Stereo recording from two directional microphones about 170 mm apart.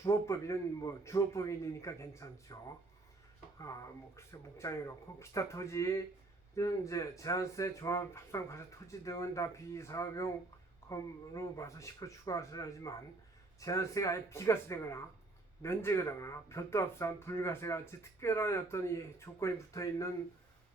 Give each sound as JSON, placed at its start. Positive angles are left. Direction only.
{"t": 0.0, "sound": "speech", "side_deg": 15}
{"t": 3.6, "sound": "speech", "side_deg": 20}